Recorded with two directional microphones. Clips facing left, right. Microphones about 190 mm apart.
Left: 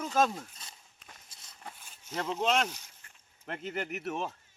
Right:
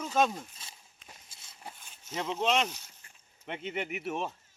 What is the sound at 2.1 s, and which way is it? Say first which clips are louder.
Speech: even; 5° right (ahead or behind).